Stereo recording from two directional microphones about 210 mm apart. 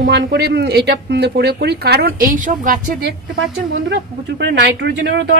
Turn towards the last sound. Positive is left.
turn(degrees=-55)  # may be behind; listen again after turning